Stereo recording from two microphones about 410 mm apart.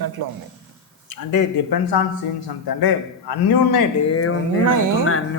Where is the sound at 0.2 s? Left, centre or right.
Right.